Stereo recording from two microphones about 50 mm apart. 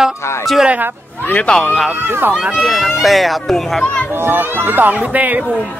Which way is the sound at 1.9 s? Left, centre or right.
Right.